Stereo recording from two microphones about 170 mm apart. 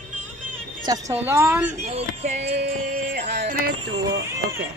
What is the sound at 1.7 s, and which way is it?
Music, 40° right (ahead or behind).